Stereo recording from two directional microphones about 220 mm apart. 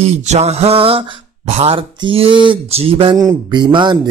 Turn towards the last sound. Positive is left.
turn(degrees=-20)  # may be behind; listen again after turning